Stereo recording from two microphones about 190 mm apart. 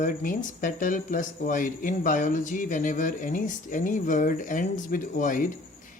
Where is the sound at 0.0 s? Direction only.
45° left (ahead or behind).